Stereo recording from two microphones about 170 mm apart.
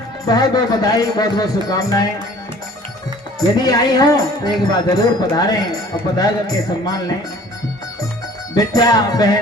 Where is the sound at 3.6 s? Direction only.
25° left (ahead or behind).